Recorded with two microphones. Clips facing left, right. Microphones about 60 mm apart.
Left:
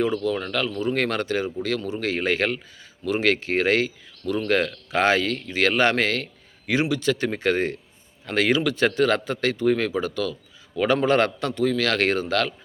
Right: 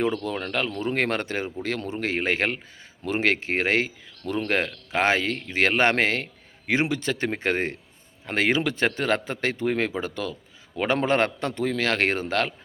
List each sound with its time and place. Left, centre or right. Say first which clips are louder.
0.0 s speech: left 3 dB; right